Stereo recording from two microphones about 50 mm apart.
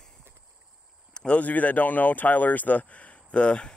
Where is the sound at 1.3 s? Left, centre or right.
Left.